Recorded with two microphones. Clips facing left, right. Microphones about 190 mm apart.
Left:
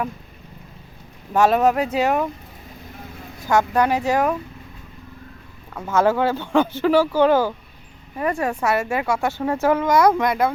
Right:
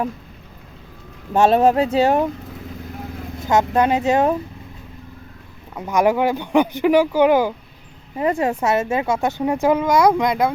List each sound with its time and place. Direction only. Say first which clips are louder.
1.3 s speech: right 2 dB; 25° right (ahead or behind)
3.4 s speech: right 1 dB; 20° right (ahead or behind)
5.7 s speech: right 1 dB; 15° right (ahead or behind)